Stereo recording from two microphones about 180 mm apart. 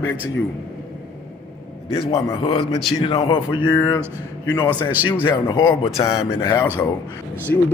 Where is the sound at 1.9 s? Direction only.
35° left (ahead or behind).